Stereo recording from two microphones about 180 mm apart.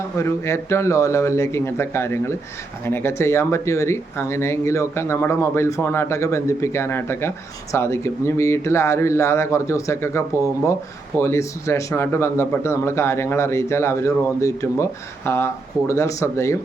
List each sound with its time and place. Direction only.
0.2 s speech: 15° left (ahead or behind)